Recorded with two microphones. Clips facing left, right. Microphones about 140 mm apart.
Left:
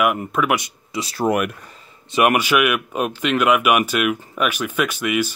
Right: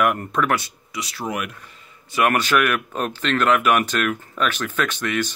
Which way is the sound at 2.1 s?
15° left (ahead or behind).